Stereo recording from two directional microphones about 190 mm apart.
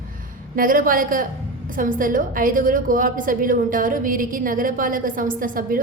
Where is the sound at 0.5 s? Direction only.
45° right (ahead or behind).